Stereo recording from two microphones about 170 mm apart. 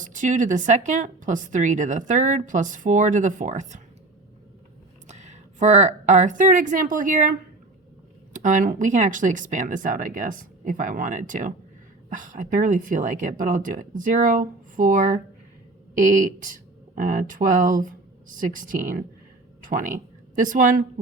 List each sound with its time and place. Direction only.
0.0 s a woman's voice: 50° right (ahead or behind)
5.0 s a woman's voice: 45° right (ahead or behind)